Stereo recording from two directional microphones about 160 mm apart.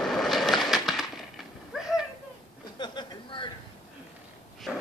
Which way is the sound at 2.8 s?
30° left (ahead or behind).